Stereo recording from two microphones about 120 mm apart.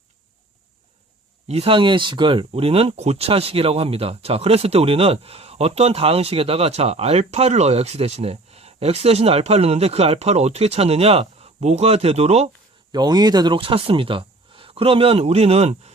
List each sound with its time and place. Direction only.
1.5 s speech: 55° right (ahead or behind)
12.9 s speech: 35° right (ahead or behind); by 15.9 s 60° right (ahead or behind)